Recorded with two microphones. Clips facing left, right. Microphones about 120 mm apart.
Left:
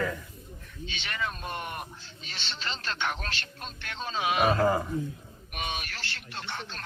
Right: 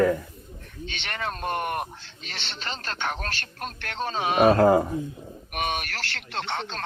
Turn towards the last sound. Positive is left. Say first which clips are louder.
# right 8 dB
turn(degrees=-80)